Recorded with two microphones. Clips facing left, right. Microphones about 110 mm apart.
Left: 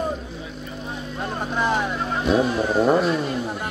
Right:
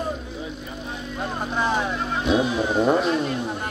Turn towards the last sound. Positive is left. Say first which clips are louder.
# left 1 dB
turn(degrees=5)  # may be behind; listen again after turning